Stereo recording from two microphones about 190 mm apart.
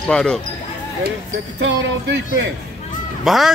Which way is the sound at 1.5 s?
65° right (ahead or behind).